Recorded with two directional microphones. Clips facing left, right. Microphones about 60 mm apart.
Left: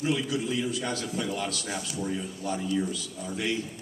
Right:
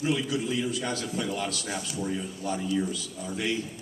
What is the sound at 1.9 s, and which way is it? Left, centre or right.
Speech, centre.